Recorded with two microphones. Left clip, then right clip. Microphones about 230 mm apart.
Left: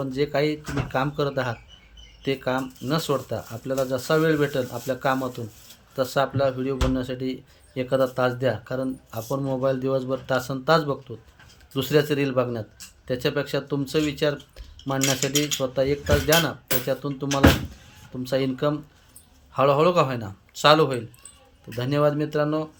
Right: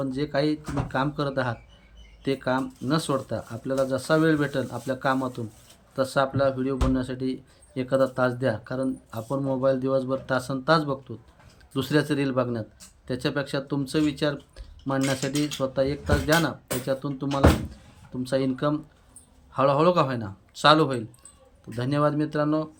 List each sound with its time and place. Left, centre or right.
0.0 s speech: centre